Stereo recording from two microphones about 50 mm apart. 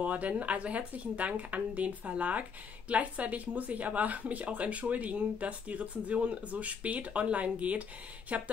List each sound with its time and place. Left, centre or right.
0.0 s speech: right